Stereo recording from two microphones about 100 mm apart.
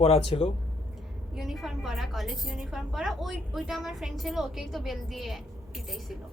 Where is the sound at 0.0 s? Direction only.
90° left.